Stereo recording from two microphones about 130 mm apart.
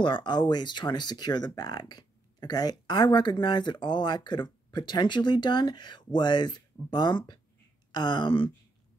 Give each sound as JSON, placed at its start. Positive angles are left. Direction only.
{"t": 0.0, "sound": "speech", "side_deg": 35}